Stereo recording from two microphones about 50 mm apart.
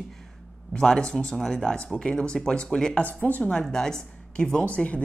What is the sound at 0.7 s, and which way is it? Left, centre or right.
Speech, centre.